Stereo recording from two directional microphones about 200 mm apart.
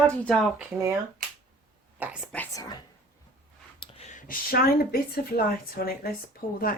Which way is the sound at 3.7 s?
25° left (ahead or behind).